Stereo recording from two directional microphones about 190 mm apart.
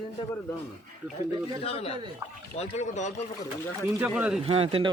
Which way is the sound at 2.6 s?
35° left (ahead or behind).